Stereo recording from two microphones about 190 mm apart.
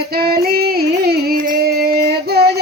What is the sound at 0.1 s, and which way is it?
Music, 55° right (ahead or behind).